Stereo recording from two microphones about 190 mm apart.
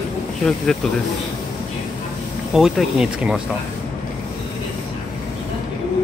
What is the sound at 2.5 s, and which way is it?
Speech, centre (ahead or behind).